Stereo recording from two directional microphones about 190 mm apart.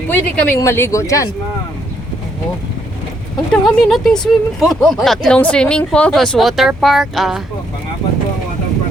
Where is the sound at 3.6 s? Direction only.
Centre (ahead or behind).